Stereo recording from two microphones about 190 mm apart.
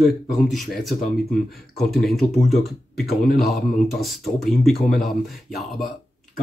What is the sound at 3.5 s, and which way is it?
Speech, centre (ahead or behind).